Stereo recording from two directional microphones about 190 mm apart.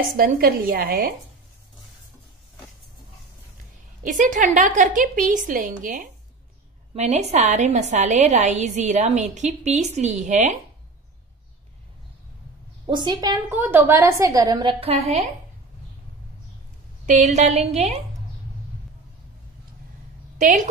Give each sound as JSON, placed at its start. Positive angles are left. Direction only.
{"t": 0.2, "sound": "a woman's voice", "side_deg": -50}
{"t": 4.0, "sound": "a woman's voice", "side_deg": -40}
{"t": 12.8, "sound": "a woman's voice", "side_deg": -25}
{"t": 13.6, "sound": "a woman's voice", "side_deg": -10}
{"t": 17.0, "sound": "a woman's voice", "side_deg": -40}
{"t": 20.3, "sound": "a woman's voice", "side_deg": -40}